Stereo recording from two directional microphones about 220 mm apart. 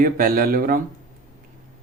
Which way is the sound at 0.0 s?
40° right (ahead or behind).